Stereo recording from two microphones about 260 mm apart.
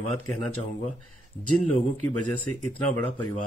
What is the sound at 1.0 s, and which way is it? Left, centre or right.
Speech, left.